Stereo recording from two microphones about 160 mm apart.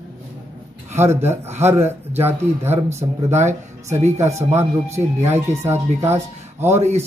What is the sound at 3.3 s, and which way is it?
Speech, 45° right (ahead or behind).